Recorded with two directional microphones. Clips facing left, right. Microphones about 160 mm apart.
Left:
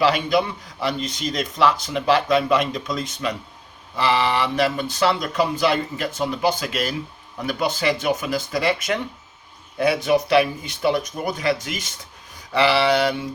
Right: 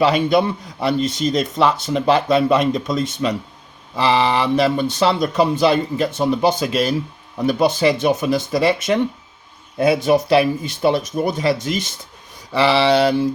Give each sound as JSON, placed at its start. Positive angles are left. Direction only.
{"t": 0.0, "sound": "speech", "side_deg": -25}